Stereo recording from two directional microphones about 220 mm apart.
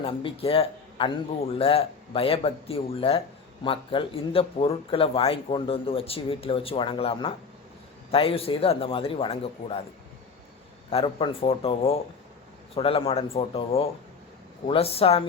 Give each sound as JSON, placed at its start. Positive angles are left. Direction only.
{"t": 0.0, "sound": "speech", "side_deg": 25}
{"t": 10.9, "sound": "speech", "side_deg": 25}